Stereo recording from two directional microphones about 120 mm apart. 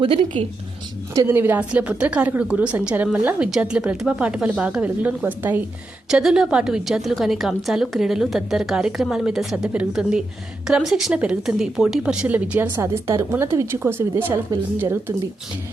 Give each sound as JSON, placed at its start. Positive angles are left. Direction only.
{"t": 0.0, "sound": "a woman's voice", "side_deg": -50}
{"t": 1.1, "sound": "a woman's voice", "side_deg": -20}
{"t": 6.1, "sound": "a woman's voice", "side_deg": -5}